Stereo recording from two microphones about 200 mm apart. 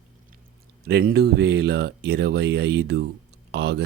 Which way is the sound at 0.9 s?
55° right (ahead or behind).